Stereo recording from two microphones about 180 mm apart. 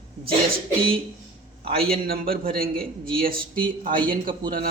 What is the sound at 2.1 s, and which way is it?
A man's voice, 55° right (ahead or behind).